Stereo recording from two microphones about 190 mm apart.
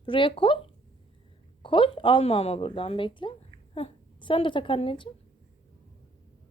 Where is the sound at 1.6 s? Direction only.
25° left (ahead or behind).